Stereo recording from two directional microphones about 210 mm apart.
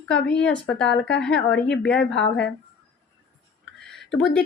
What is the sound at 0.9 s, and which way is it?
Speech, 55° left (ahead or behind).